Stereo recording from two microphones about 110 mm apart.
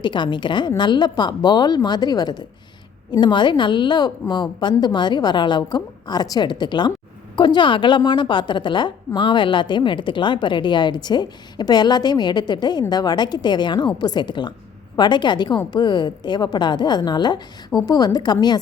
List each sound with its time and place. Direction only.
0.0 s a woman's voice: 45° left (ahead or behind)